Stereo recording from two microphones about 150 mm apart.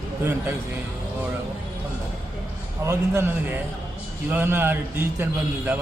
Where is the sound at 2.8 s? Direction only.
15° right (ahead or behind).